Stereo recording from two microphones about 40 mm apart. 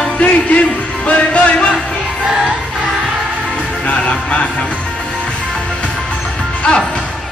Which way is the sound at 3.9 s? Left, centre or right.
Left.